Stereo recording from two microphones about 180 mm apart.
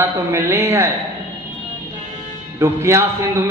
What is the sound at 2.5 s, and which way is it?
Speech, 15° right (ahead or behind).